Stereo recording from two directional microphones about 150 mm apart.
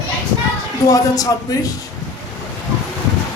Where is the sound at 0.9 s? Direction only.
25° left (ahead or behind).